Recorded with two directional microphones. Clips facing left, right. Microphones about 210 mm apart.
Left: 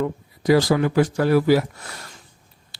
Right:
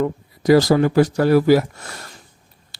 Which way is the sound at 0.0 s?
40° right (ahead or behind).